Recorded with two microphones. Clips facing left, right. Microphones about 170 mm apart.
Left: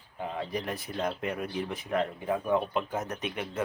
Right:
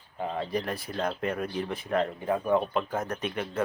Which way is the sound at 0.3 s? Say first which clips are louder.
Right 2 dB; 15° left (ahead or behind).